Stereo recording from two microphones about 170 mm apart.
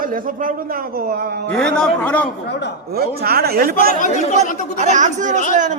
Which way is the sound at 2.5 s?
90° left.